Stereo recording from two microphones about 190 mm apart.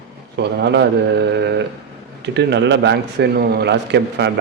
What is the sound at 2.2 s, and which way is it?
A man's voice, 65° right (ahead or behind).